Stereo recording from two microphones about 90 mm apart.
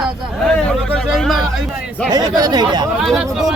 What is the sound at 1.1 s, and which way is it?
Speech, centre (ahead or behind).